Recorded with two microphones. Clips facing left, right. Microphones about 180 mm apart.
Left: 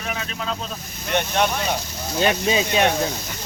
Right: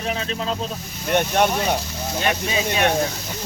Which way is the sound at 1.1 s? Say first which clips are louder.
Right 3 dB; 50° right (ahead or behind).